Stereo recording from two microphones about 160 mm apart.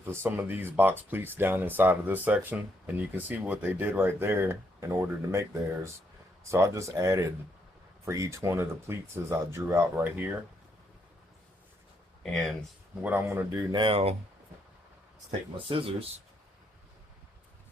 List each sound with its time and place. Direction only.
0.0 s speech: 15° right (ahead or behind)
12.2 s speech: centre (ahead or behind)
13.0 s speech: 10° right (ahead or behind)
13.7 s speech: 35° right (ahead or behind)
15.5 s speech: 35° right (ahead or behind)